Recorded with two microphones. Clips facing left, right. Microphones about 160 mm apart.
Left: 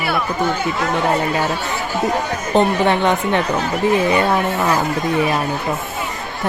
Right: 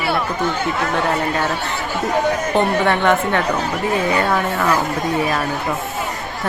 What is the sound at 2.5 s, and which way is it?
Speech, 20° left (ahead or behind).